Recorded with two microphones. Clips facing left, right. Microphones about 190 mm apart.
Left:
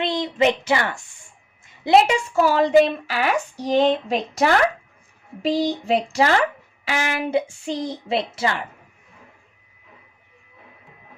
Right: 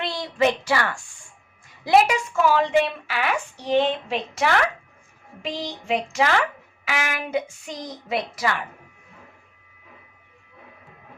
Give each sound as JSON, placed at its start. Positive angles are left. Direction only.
{"t": 0.0, "sound": "a woman's voice", "side_deg": 20}